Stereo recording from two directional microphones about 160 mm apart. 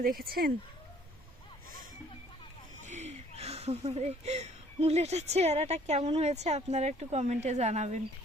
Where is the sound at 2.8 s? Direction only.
45° right (ahead or behind).